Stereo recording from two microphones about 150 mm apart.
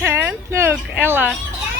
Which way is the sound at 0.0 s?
15° right (ahead or behind).